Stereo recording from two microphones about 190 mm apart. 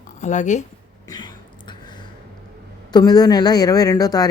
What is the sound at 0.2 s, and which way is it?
Speech, 40° left (ahead or behind).